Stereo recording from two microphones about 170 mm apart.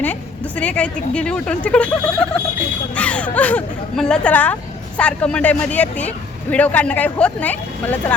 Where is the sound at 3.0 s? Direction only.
5° left (ahead or behind).